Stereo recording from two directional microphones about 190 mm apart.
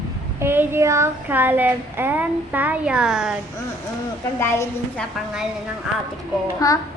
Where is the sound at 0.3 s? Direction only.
10° right (ahead or behind).